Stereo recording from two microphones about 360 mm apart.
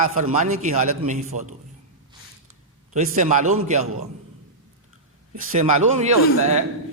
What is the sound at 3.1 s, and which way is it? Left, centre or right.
Speech, centre.